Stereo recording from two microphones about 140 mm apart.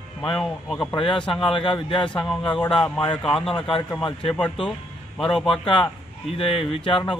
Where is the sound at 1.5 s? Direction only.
40° left (ahead or behind).